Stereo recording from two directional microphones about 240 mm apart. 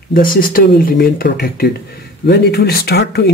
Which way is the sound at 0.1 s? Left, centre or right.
Left.